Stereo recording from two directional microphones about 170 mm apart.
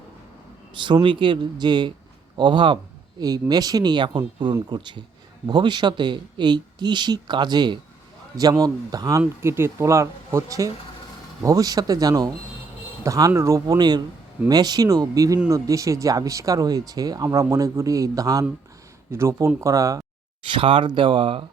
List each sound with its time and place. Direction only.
0.8 s speech: 25° right (ahead or behind)
20.5 s speech: 30° right (ahead or behind)